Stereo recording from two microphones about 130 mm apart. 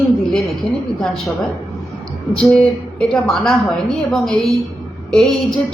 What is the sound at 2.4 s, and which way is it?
A woman's voice, 5° left (ahead or behind).